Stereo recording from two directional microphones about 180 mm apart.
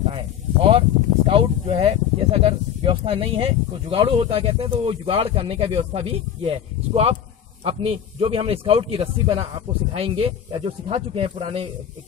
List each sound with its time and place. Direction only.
0.0 s speech: 30° right (ahead or behind)